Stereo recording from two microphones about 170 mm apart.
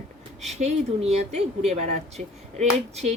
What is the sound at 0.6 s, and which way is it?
Speech, 40° right (ahead or behind).